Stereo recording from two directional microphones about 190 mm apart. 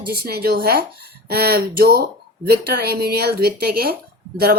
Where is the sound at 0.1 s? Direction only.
55° right (ahead or behind).